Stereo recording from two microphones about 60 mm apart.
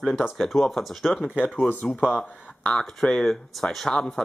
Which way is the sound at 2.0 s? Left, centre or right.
Left.